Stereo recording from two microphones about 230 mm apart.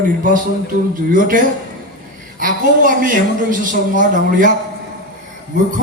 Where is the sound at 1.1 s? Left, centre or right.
Right.